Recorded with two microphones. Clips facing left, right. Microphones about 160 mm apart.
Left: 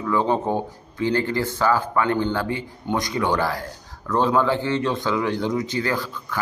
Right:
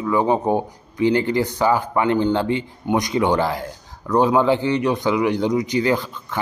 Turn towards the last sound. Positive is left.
turn(degrees=-20)  # may be behind; listen again after turning